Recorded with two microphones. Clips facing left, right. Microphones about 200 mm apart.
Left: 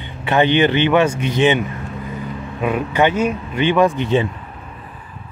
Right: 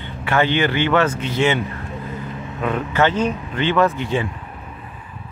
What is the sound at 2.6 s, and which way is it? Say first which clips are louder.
Speech: left 2 dB; 15° left (ahead or behind).